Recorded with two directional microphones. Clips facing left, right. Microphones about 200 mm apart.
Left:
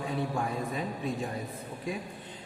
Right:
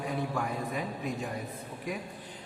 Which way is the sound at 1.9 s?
25° left (ahead or behind).